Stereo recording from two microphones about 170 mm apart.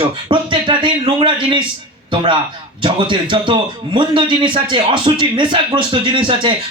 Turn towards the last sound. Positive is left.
turn(degrees=-30)  # may be behind; listen again after turning